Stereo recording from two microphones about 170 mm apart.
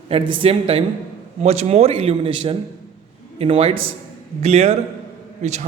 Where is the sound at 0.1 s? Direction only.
35° right (ahead or behind).